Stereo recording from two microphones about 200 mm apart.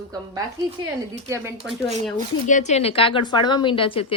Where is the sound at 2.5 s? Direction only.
35° left (ahead or behind).